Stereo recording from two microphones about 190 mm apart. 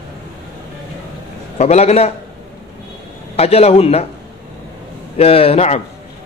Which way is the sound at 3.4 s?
35° left (ahead or behind).